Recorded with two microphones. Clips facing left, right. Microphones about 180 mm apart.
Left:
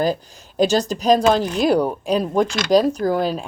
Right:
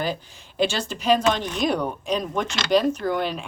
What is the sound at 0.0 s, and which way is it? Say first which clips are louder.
Speech: left 7 dB; 40° left (ahead or behind).